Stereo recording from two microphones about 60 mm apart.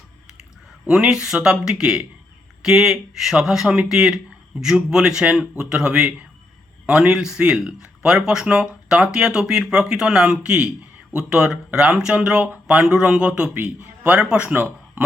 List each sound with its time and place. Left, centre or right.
0.9 s a man's voice: centre